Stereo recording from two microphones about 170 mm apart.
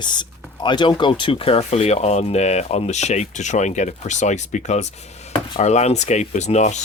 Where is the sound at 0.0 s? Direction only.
25° left (ahead or behind).